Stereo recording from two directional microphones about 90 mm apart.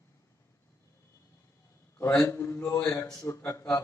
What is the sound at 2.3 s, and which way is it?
A man's voice, 30° left (ahead or behind).